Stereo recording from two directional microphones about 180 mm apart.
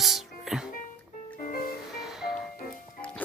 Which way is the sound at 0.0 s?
Centre (ahead or behind).